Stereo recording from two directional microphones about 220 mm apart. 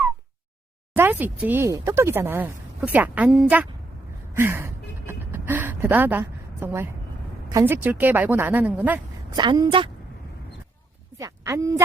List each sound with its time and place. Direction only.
0.9 s speech: 10° right (ahead or behind)
4.4 s gasp: 10° right (ahead or behind)
7.5 s speech: 10° right (ahead or behind)
9.3 s a woman's voice: 20° right (ahead or behind)
11.2 s speech: 15° right (ahead or behind)